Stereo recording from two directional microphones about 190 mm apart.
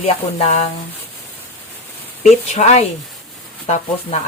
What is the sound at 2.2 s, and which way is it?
Speech, 35° left (ahead or behind).